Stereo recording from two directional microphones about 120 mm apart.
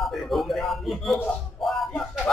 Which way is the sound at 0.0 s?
Centre (ahead or behind).